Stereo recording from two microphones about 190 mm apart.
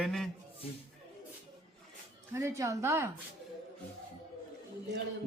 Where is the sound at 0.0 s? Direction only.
Centre (ahead or behind).